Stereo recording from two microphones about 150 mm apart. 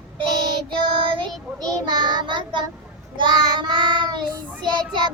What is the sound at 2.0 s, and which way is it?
Child singing, 30° right (ahead or behind).